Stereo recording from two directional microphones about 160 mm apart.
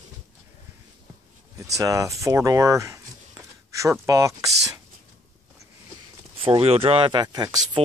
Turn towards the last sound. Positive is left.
turn(degrees=-25)  # may be behind; listen again after turning